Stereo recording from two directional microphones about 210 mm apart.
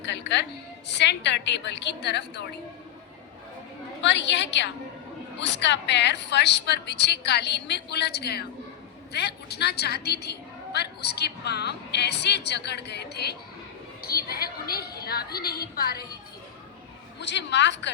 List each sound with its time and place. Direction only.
0.0 s music: 55° left (ahead or behind)
0.9 s a woman's voice: 55° left (ahead or behind)
4.0 s a woman's voice: 55° left (ahead or behind)
17.2 s a woman's voice: 55° left (ahead or behind)